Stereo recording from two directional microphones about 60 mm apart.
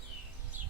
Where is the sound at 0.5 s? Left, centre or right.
Right.